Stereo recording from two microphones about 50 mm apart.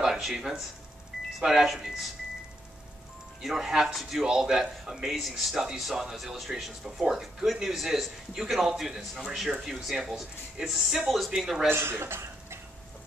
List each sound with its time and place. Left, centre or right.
0.0 s a man's voice: centre
3.4 s a man's voice: centre
11.7 s speech: right